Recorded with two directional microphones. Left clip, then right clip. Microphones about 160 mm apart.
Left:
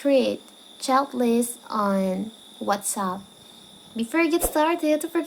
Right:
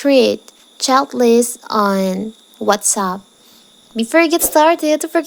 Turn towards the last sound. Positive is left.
turn(degrees=-60)  # may be behind; listen again after turning